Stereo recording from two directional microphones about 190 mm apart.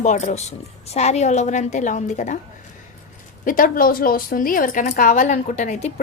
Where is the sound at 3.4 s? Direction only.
45° left (ahead or behind).